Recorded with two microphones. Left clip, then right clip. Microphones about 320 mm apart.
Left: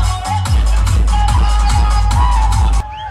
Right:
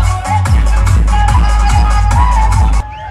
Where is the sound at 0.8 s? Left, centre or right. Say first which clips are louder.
Right 3 dB; centre.